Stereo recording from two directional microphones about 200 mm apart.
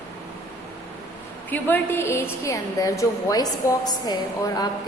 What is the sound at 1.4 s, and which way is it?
A woman's voice, 10° left (ahead or behind).